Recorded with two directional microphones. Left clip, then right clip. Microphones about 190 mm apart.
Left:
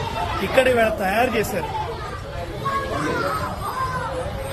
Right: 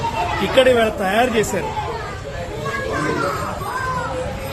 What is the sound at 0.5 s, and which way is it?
Speech, 20° right (ahead or behind).